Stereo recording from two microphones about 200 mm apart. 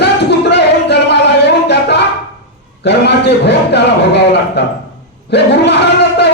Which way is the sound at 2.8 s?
55° left (ahead or behind).